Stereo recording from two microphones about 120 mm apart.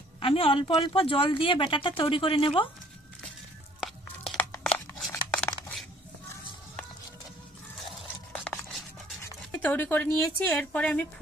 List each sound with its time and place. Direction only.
0.2 s speech: 50° left (ahead or behind)
3.8 s a sound: centre (ahead or behind)
9.6 s a woman's voice: 15° left (ahead or behind)